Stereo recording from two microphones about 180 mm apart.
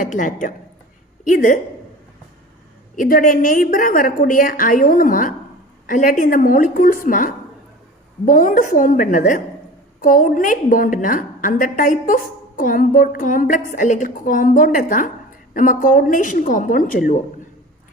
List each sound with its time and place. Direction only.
0.0 s a woman's voice: 45° left (ahead or behind)
2.9 s a woman's voice: 50° left (ahead or behind)